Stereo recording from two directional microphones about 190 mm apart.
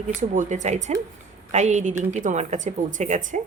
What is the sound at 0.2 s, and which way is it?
Speech, 40° right (ahead or behind).